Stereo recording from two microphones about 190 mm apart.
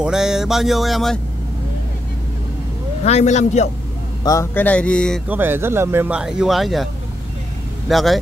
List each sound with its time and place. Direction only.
0.0 s music: 5° right (ahead or behind)
3.1 s a man's voice: 35° left (ahead or behind)
4.2 s speech: 15° left (ahead or behind)
5.3 s speech: 10° right (ahead or behind)
7.9 s music: centre (ahead or behind)